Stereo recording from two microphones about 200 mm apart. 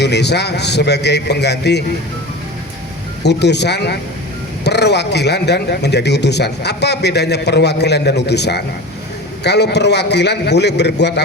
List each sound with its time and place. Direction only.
0.0 s speech: 55° left (ahead or behind)
3.2 s speech: 55° left (ahead or behind)